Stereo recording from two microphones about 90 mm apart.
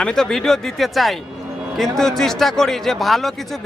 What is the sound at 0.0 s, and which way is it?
A man's voice, 5° left (ahead or behind).